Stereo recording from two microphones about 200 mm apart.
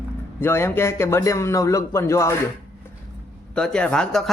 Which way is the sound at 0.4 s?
10° left (ahead or behind).